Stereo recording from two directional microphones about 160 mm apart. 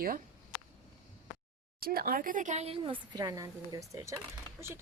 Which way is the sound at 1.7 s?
70° right (ahead or behind).